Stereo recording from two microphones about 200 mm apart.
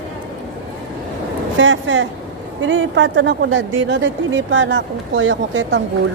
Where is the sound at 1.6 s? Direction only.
70° right (ahead or behind).